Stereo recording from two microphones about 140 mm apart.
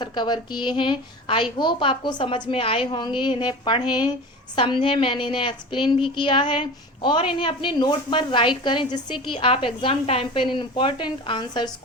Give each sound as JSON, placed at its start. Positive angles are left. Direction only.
{"t": 0.0, "sound": "a woman's voice", "side_deg": 30}